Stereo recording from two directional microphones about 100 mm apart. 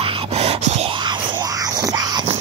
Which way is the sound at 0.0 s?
85° right.